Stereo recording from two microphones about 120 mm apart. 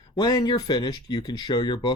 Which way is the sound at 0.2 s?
35° left (ahead or behind).